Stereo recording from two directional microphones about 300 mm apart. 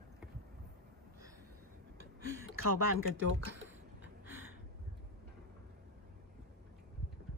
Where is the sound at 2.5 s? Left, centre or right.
Right.